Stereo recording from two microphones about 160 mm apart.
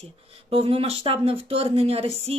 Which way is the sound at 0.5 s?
35° right (ahead or behind).